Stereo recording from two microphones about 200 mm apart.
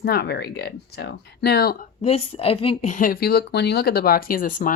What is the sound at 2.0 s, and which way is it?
A woman's voice, 30° left (ahead or behind).